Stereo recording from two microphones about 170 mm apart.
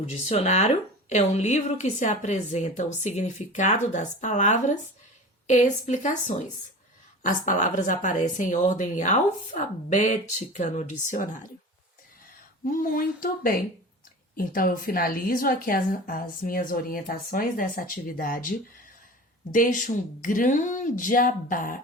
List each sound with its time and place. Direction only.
0.1 s speech: 40° left (ahead or behind)
7.2 s speech: 50° left (ahead or behind)
12.6 s a woman's voice: 55° left (ahead or behind)